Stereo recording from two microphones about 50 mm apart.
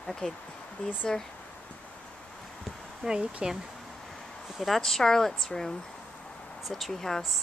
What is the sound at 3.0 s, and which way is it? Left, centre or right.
Speech, centre.